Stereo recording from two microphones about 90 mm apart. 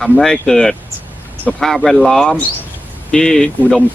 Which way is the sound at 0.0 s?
5° left (ahead or behind).